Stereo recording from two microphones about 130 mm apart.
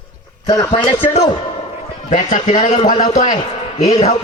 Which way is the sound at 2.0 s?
70° left (ahead or behind).